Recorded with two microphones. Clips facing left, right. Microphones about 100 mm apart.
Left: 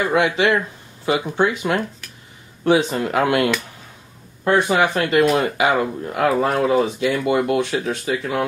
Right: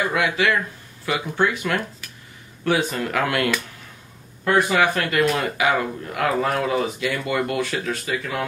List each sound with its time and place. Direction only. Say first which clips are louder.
0.1 s speech: left 4 dB; 25° left (ahead or behind)